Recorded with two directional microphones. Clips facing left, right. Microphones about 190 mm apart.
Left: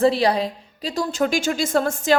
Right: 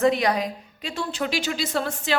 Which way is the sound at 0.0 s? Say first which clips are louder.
Left 3 dB; 30° left (ahead or behind).